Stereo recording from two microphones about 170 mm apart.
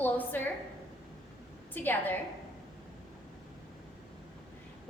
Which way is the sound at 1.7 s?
10° left (ahead or behind).